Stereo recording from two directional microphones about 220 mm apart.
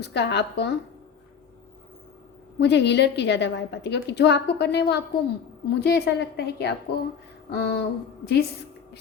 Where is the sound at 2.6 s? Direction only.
50° left (ahead or behind).